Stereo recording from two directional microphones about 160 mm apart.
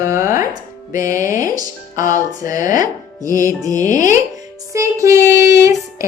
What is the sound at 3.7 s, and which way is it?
Speech, 50° left (ahead or behind).